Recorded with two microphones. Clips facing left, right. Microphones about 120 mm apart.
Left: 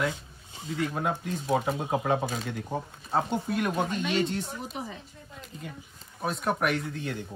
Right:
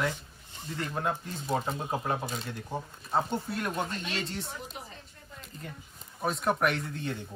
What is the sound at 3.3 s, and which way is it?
Chopping, 10° left (ahead or behind).